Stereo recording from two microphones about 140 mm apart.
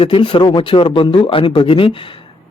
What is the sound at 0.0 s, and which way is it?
Speech, 35° left (ahead or behind).